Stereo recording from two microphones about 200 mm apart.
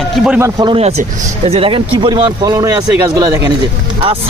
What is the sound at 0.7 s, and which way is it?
Speech, 30° right (ahead or behind).